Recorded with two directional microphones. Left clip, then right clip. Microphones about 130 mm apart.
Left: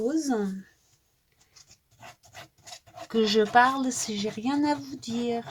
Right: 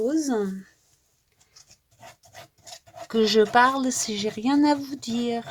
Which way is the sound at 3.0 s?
75° right (ahead or behind).